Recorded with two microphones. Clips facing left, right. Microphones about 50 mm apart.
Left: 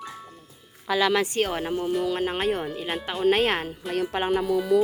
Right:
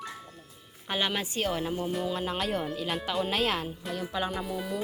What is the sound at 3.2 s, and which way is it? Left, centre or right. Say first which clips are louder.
Speech: left 10 dB; left.